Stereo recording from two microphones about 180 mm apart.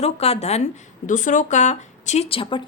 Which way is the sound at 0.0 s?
35° left (ahead or behind).